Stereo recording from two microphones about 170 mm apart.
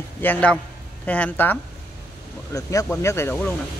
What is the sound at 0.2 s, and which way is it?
Speech, 10° left (ahead or behind).